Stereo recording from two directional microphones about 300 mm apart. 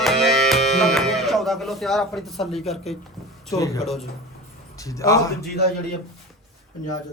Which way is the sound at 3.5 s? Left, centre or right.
Centre.